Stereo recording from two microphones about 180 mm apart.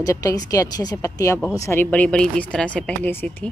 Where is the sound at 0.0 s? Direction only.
20° left (ahead or behind).